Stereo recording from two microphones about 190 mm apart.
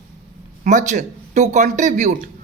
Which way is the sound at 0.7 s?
40° right (ahead or behind).